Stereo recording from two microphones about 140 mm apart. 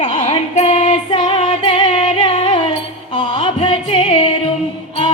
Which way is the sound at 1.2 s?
40° left (ahead or behind).